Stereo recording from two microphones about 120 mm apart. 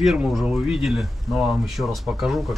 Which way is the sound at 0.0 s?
5° right (ahead or behind).